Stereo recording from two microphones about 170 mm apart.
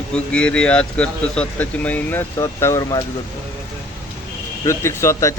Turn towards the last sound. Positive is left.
turn(degrees=15)  # may be behind; listen again after turning